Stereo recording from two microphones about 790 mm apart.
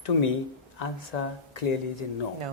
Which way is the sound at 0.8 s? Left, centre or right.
Left.